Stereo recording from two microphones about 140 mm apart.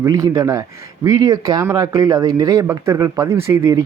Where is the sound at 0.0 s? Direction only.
25° right (ahead or behind).